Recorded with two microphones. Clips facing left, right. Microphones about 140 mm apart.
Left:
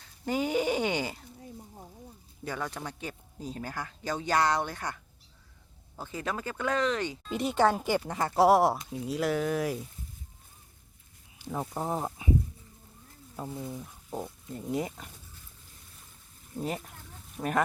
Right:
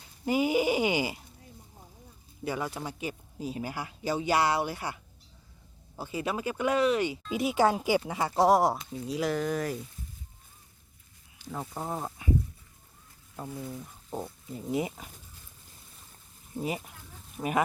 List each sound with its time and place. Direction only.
0.0 s a sound: 10° right (ahead or behind)
2.4 s speech: 10° right (ahead or behind)
6.0 s speech: 10° right (ahead or behind)
8.3 s speech: 5° left (ahead or behind)
11.7 s speech: 15° left (ahead or behind)
13.5 s speech: 20° left (ahead or behind)
14.2 s speech: 5° right (ahead or behind)
16.6 s speech: 5° right (ahead or behind)